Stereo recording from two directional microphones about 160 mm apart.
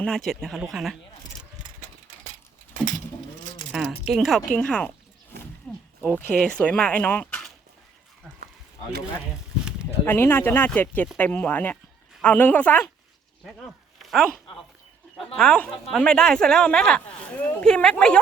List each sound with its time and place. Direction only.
0.0 s speech: 5° left (ahead or behind)
3.7 s a sound: 5° right (ahead or behind)
4.0 s speech: centre (ahead or behind)
5.3 s a sound: 90° right
6.1 s speech: 10° left (ahead or behind)
10.1 s speech: 15° left (ahead or behind)
14.0 s speech: centre (ahead or behind)